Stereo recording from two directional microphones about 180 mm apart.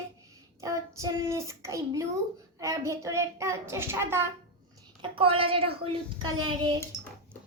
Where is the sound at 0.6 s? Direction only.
20° right (ahead or behind).